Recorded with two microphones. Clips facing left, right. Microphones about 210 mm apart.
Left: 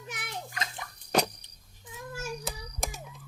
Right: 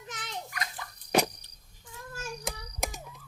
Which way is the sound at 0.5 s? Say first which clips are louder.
Left 1 dB; 25° left (ahead or behind).